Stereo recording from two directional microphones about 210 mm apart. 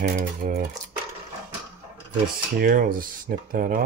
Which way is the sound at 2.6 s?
45° right (ahead or behind).